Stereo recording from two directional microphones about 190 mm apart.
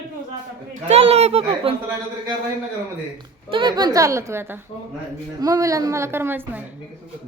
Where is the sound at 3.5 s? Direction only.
25° right (ahead or behind).